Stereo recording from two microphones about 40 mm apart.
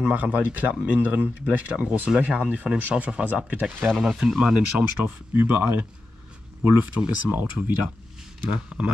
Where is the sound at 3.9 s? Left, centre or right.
Centre.